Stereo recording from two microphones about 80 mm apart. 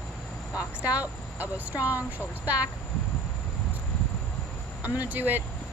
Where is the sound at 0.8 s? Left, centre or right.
Centre.